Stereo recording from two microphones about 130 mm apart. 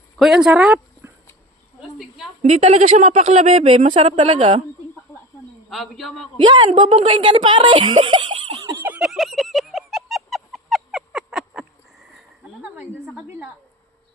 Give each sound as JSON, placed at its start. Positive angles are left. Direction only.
{"t": 0.2, "sound": "speech", "side_deg": -5}
{"t": 2.4, "sound": "speech", "side_deg": -60}
{"t": 3.9, "sound": "a woman's voice", "side_deg": -45}
{"t": 5.1, "sound": "a sound", "side_deg": 20}
{"t": 5.6, "sound": "speech", "side_deg": 0}
{"t": 6.7, "sound": "a woman's voice", "side_deg": -40}
{"t": 8.0, "sound": "giggle", "side_deg": -40}
{"t": 8.8, "sound": "fowl", "side_deg": -10}
{"t": 9.0, "sound": "fowl", "side_deg": 0}
{"t": 12.7, "sound": "a sound", "side_deg": -15}